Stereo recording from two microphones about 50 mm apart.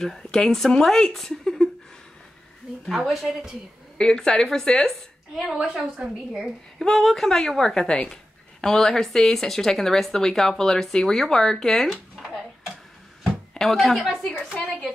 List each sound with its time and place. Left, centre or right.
0.0 s speech: centre
1.1 s a sound: centre
3.1 s a woman's voice: centre
4.0 s speech: centre
5.6 s a woman's voice: centre
6.8 s speech: centre
13.2 s a sound: centre
14.5 s a woman's voice: left